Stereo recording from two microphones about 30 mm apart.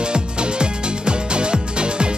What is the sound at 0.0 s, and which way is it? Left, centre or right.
Music, right.